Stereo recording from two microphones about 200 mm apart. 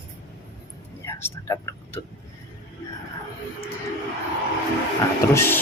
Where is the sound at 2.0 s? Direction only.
15° left (ahead or behind).